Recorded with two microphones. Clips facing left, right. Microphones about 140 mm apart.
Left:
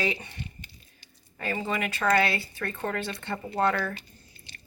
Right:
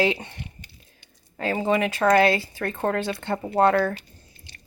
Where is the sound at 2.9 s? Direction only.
70° right (ahead or behind).